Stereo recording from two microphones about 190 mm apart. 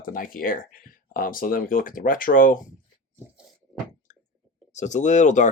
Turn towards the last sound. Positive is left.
turn(degrees=40)  # may be behind; listen again after turning